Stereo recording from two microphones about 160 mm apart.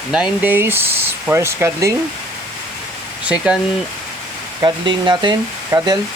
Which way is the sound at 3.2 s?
5° right (ahead or behind).